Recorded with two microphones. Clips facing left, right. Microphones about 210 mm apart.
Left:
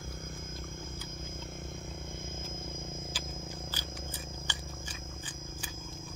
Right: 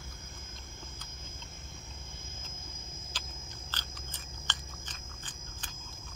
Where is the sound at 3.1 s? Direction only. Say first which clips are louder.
Left 7 dB; 10° left (ahead or behind).